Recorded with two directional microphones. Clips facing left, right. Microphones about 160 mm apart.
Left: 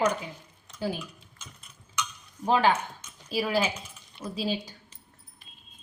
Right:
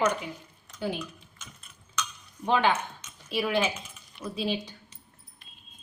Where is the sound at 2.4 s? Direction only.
35° left (ahead or behind).